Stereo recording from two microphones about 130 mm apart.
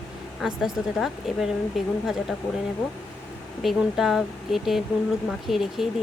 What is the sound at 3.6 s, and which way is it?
Speech, 5° right (ahead or behind).